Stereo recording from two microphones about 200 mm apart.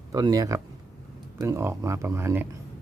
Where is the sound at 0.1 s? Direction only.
15° right (ahead or behind).